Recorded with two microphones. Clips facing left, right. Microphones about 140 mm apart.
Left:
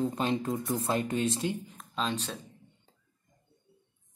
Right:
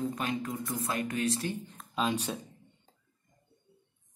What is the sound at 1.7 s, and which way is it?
Speech, 5° right (ahead or behind).